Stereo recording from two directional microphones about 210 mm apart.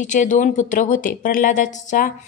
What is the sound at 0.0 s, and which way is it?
A woman's voice, 35° left (ahead or behind).